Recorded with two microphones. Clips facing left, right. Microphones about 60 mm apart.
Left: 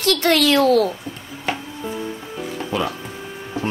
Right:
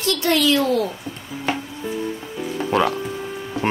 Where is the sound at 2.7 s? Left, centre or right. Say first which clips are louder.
Right 5 dB; right.